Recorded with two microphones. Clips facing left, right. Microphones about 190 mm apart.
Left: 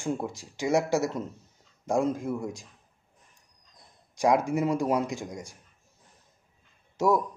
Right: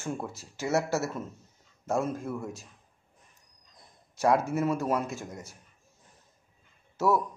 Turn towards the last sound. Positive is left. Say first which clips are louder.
# left 2 dB
turn(degrees=15)  # may be behind; listen again after turning